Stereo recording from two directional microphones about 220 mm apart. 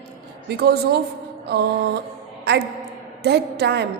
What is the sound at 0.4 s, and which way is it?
A woman's voice, 45° right (ahead or behind).